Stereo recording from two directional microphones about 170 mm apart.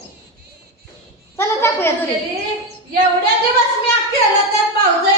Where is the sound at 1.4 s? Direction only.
15° left (ahead or behind).